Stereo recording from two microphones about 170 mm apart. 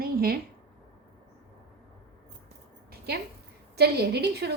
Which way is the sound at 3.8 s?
75° right (ahead or behind).